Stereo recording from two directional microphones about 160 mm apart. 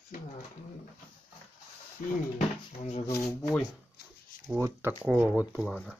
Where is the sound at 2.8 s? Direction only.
45° left (ahead or behind).